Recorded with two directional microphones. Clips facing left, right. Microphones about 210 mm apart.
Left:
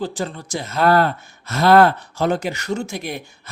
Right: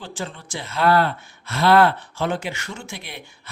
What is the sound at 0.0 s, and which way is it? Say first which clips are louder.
Speech: left 7 dB; 40° left (ahead or behind).